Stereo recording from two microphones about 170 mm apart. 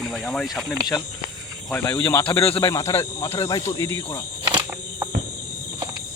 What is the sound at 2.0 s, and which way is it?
Speech, 15° left (ahead or behind).